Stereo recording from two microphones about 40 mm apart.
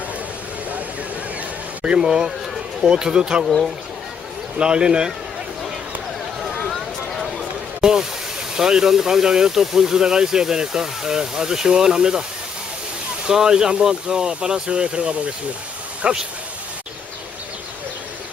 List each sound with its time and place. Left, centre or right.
2.0 s speech: centre
4.5 s speech: right
6.7 s a sound: centre
7.8 s a sound: centre
8.5 s speech: centre
13.2 s speech: centre